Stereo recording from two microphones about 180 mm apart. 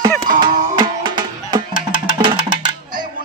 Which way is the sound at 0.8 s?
25° right (ahead or behind).